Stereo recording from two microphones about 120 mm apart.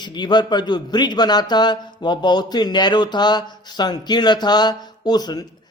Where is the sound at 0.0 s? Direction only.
40° left (ahead or behind).